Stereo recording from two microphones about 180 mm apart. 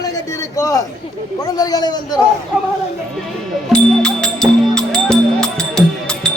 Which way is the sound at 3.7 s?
5° left (ahead or behind).